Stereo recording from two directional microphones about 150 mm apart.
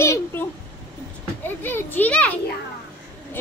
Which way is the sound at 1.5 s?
15° left (ahead or behind).